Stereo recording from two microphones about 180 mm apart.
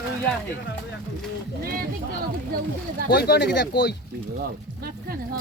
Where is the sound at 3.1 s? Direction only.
60° left (ahead or behind).